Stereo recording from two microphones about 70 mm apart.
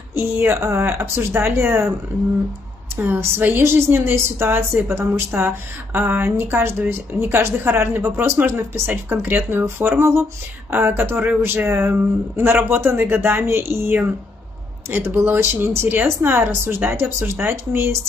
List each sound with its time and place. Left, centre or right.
0.1 s a woman's voice: right
3.0 s a woman's voice: right